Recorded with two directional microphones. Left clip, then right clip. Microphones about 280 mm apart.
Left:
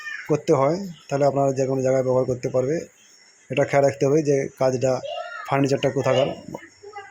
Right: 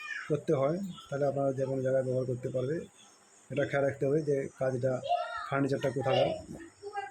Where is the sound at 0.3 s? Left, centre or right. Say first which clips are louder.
Left 10 dB; centre.